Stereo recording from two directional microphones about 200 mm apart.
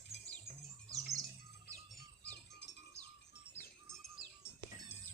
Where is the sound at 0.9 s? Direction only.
15° right (ahead or behind).